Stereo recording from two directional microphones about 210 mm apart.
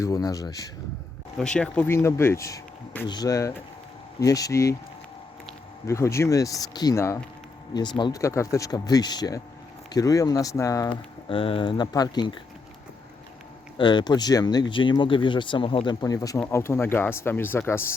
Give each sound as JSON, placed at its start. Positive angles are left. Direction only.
{"t": 0.0, "sound": "speech", "side_deg": 15}
{"t": 1.4, "sound": "speech", "side_deg": 5}
{"t": 5.8, "sound": "speech", "side_deg": 15}
{"t": 13.7, "sound": "speech", "side_deg": 20}